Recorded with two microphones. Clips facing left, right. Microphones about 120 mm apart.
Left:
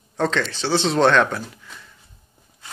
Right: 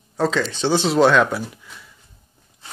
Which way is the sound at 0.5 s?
20° right (ahead or behind).